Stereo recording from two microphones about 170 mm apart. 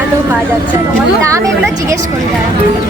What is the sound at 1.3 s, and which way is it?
Speech, 15° right (ahead or behind).